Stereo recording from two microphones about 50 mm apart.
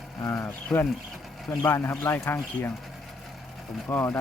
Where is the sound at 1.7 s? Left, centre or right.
Left.